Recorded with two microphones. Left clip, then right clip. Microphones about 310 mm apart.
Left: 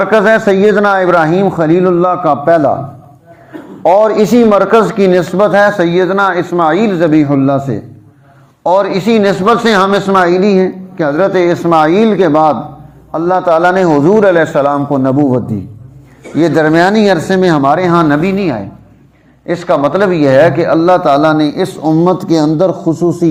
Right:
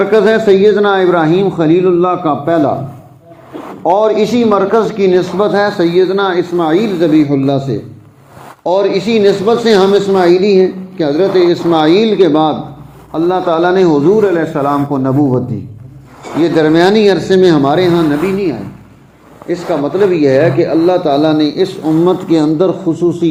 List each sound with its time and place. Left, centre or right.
0.0 s a man's voice: left
3.8 s a man's voice: left
16.4 s a man's voice: left